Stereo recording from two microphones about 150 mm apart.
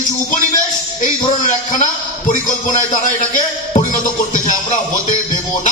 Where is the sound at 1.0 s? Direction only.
55° left (ahead or behind).